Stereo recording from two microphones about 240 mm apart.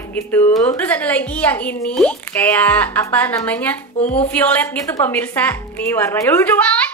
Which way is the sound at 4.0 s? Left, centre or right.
Left.